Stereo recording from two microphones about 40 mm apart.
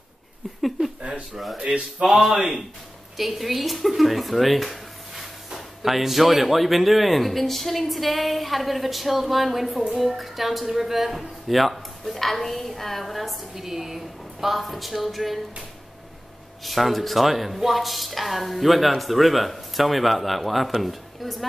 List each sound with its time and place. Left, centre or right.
1.3 s speech: centre
1.6 s speech: centre
16.6 s speech: centre